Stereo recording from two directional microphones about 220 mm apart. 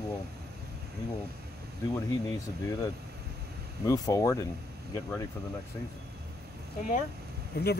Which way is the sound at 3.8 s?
15° left (ahead or behind).